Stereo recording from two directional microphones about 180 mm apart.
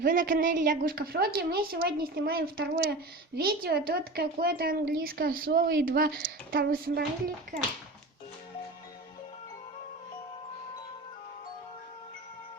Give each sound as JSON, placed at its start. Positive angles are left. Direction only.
{"t": 0.0, "sound": "a woman's voice", "side_deg": -50}